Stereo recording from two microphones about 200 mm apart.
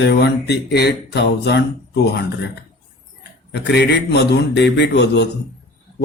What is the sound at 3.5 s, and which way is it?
Speech, 55° left (ahead or behind).